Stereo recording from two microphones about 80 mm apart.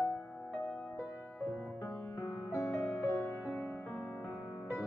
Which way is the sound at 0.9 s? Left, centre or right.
Left.